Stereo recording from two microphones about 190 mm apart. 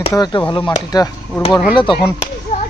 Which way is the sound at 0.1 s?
20° left (ahead or behind).